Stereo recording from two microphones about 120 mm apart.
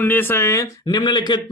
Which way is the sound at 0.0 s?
15° left (ahead or behind).